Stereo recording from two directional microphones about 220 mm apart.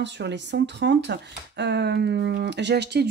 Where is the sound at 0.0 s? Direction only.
50° right (ahead or behind).